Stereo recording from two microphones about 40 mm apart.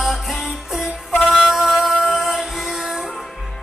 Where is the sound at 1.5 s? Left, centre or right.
Centre.